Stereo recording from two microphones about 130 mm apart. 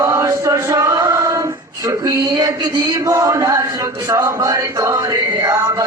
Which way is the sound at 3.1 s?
25° right (ahead or behind).